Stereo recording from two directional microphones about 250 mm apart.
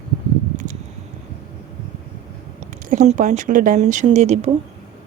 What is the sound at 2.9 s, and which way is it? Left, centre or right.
Speech, right.